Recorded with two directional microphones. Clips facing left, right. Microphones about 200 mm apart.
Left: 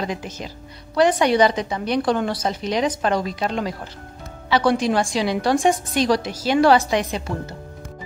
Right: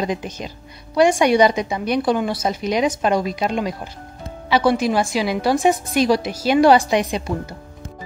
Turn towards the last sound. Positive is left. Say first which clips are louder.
# right 3 dB
turn(degrees=-15)  # may be behind; listen again after turning